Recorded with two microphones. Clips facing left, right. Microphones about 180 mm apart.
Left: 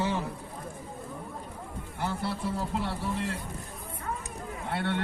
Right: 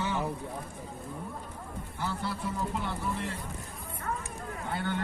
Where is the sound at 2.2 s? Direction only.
30° left (ahead or behind).